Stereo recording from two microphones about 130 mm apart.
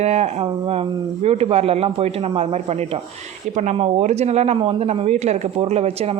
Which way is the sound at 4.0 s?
60° right (ahead or behind).